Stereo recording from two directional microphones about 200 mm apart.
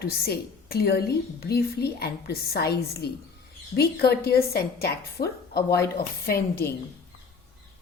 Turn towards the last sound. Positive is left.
turn(degrees=50)  # may be behind; listen again after turning